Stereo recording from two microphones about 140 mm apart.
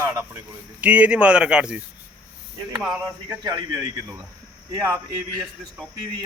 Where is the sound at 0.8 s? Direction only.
10° right (ahead or behind).